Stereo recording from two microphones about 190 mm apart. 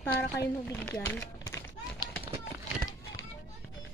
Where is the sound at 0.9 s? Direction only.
10° left (ahead or behind).